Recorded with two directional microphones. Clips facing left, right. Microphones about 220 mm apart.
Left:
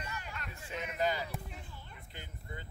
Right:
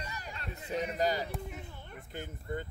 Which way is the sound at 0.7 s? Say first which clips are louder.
Right 4 dB; 35° right (ahead or behind).